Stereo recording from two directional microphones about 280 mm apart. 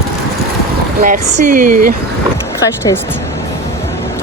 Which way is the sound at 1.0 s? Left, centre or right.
Right.